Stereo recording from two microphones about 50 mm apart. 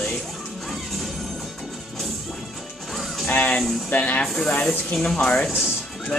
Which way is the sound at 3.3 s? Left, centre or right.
Left.